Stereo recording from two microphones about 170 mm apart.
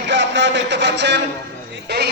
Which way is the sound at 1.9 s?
80° right.